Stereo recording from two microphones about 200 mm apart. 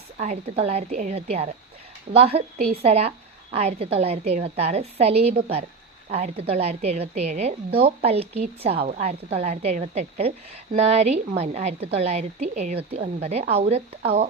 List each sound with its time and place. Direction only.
0.2 s a woman's voice: 35° right (ahead or behind)